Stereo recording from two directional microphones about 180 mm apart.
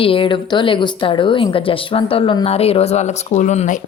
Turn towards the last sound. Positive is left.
turn(degrees=40)  # may be behind; listen again after turning